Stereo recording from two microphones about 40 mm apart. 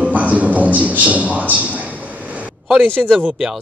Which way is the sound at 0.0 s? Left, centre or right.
Right.